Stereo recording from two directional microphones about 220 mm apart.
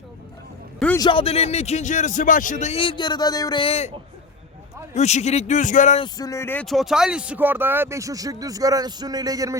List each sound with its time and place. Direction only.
0.9 s a man's voice: 20° left (ahead or behind)
4.9 s a man's voice: 30° left (ahead or behind)
6.1 s speech: 15° left (ahead or behind); by 9.6 s 15° right (ahead or behind)